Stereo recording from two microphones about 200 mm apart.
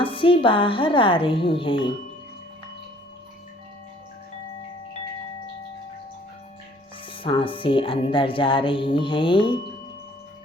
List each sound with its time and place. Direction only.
0.0 s speech: 25° left (ahead or behind)
7.1 s speech: 25° left (ahead or behind)